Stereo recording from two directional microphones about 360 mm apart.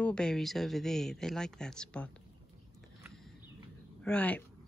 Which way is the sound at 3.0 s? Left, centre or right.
Centre.